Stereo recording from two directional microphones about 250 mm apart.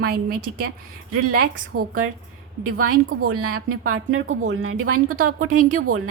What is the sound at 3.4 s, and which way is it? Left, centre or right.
Speech, right.